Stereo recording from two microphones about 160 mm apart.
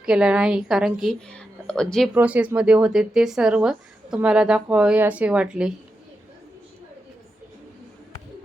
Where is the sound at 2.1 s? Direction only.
10° right (ahead or behind).